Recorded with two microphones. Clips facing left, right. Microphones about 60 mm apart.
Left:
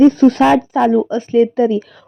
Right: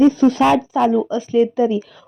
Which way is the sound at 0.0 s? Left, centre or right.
Left.